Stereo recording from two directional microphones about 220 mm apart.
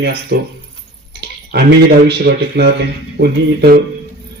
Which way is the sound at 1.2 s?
45° right (ahead or behind).